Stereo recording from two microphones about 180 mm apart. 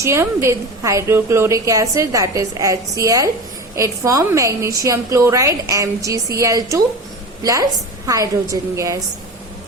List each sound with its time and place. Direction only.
0.0 s a woman's voice: 15° right (ahead or behind)